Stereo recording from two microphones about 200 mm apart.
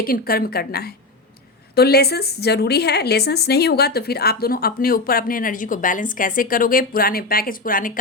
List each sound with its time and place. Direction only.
0.0 s a woman's voice: 50° left (ahead or behind)